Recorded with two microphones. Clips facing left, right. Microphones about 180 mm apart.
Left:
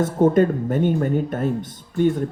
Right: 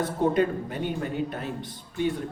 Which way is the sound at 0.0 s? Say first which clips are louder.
Left 7 dB; 45° left (ahead or behind).